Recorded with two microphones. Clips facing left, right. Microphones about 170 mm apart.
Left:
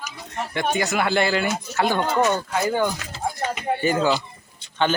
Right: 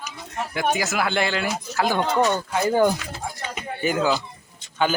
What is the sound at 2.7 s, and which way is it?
Speech, 35° right (ahead or behind).